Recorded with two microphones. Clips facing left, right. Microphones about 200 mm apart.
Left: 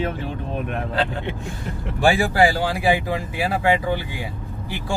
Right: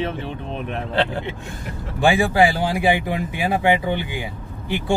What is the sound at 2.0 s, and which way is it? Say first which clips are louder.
Speech: right 1 dB; 20° right (ahead or behind).